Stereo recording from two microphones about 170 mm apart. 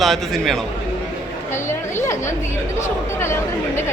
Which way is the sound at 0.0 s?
Centre (ahead or behind).